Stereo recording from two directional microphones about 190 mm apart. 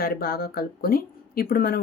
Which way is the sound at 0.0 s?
50° left (ahead or behind).